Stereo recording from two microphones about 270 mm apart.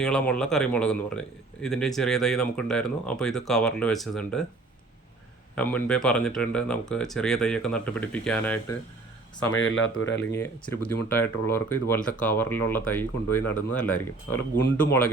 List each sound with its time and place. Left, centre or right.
0.0 s speech: centre
5.5 s speech: centre
9.6 s speech: left
10.2 s speech: centre